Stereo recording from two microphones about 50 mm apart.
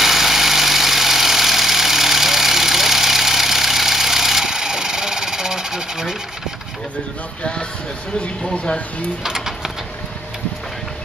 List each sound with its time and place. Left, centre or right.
0.0 s vehicle: centre
8.5 s speech: left
9.2 s speech: centre